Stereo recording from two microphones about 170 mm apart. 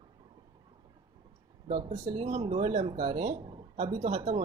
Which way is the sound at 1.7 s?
40° right (ahead or behind).